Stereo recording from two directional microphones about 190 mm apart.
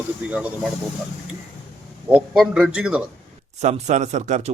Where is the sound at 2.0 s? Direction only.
5° right (ahead or behind).